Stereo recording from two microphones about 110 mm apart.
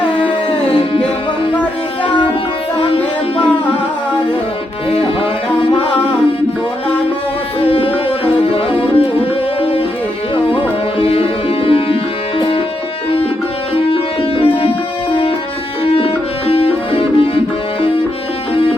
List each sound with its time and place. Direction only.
0.2 s music: 60° left (ahead or behind)
7.6 s music: 60° left (ahead or behind)
13.7 s music: 55° left (ahead or behind)
15.8 s music: 60° left (ahead or behind)